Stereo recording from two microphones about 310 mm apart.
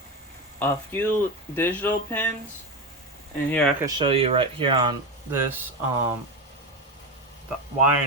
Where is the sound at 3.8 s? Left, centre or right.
Centre.